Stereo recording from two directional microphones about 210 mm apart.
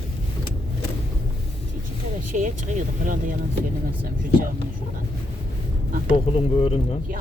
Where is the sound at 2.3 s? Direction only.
35° right (ahead or behind).